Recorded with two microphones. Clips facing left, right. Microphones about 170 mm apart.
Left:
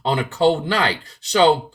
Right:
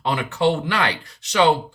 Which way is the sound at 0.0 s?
35° left (ahead or behind).